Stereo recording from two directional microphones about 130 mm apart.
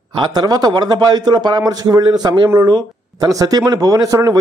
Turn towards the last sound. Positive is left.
turn(degrees=-30)  # may be behind; listen again after turning